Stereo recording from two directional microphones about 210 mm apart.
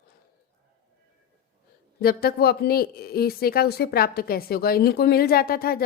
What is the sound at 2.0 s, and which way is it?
A woman's voice, 45° left (ahead or behind).